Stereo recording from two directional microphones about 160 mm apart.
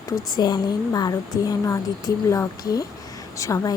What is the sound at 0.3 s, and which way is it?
Speech, 25° left (ahead or behind).